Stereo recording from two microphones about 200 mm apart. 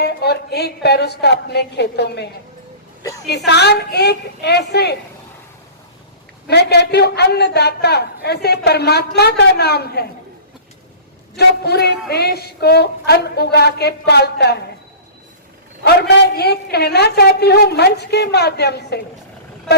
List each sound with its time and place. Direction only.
0.0 s a woman's voice: 55° left (ahead or behind)
6.5 s a woman's voice: 55° left (ahead or behind)
11.3 s a woman's voice: 55° left (ahead or behind)
15.8 s a woman's voice: 55° left (ahead or behind)